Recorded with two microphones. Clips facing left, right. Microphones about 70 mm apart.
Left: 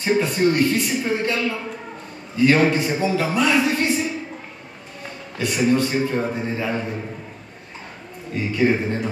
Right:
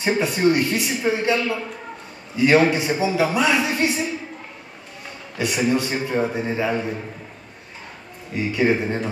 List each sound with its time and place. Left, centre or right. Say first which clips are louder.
0.0 s a man's voice: even; centre
5.4 s a man's voice: left 2 dB; centre
8.5 s a man's voice: even; centre